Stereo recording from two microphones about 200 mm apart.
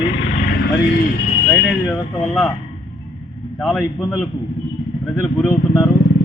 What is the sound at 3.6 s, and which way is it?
Speech, centre (ahead or behind).